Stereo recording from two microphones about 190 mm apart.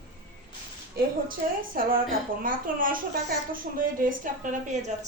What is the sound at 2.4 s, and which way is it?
A woman's voice, 45° right (ahead or behind).